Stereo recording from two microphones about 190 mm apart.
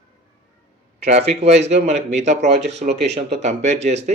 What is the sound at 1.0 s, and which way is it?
Speech, 35° right (ahead or behind).